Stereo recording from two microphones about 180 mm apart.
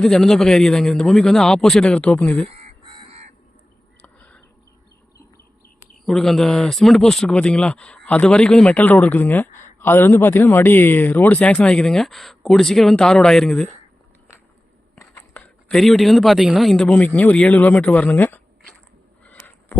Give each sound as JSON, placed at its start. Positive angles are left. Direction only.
{"t": 0.0, "sound": "speech", "side_deg": 5}
{"t": 2.5, "sound": "fowl", "side_deg": -30}
{"t": 4.0, "sound": "a sound", "side_deg": 5}
{"t": 6.1, "sound": "speech", "side_deg": 0}
{"t": 14.9, "sound": "speech", "side_deg": 10}
{"t": 19.2, "sound": "a sound", "side_deg": 10}